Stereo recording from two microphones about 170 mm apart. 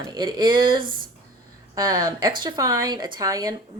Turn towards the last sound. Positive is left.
turn(degrees=-20)  # may be behind; listen again after turning